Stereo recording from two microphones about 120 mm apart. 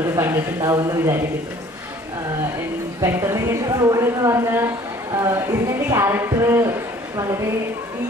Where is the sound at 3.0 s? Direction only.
25° right (ahead or behind).